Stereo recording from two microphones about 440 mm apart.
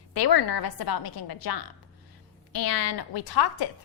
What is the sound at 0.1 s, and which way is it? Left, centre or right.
A woman's voice, left.